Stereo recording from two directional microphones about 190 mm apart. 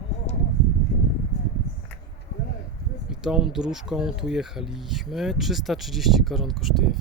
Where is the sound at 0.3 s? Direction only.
35° left (ahead or behind).